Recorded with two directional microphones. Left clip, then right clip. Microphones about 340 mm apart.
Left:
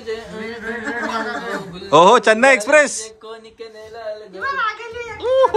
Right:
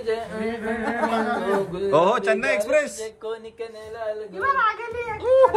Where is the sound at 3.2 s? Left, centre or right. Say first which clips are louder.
Right 4 dB; centre.